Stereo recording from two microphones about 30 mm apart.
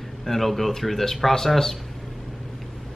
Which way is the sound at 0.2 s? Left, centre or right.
Centre.